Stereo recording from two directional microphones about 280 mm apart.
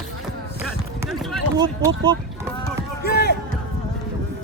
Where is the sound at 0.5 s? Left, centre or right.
Centre.